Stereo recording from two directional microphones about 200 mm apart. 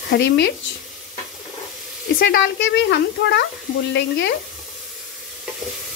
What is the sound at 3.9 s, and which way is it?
Speech, 60° left (ahead or behind).